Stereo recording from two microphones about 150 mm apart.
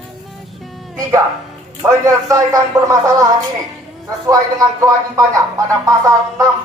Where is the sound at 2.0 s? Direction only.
20° right (ahead or behind).